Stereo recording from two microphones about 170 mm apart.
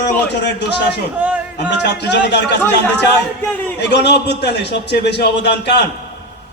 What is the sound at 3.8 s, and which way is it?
A man's voice, 90° left.